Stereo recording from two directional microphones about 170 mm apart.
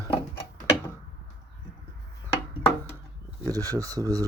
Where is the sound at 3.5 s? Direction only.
20° right (ahead or behind).